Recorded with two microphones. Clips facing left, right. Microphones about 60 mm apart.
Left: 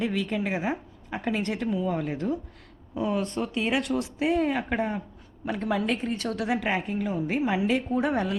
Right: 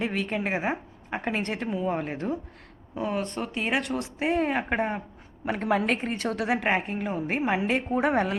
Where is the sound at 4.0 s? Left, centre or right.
Right.